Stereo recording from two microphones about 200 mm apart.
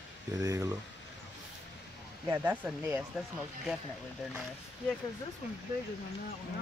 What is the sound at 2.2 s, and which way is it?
Speech, 10° right (ahead or behind).